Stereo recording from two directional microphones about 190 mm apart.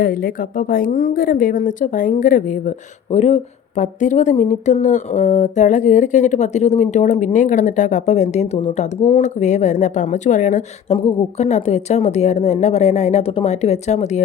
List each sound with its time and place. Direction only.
0.0 s a woman's voice: 50° left (ahead or behind)